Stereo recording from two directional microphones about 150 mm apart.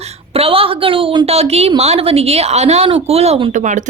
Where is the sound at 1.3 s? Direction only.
45° right (ahead or behind).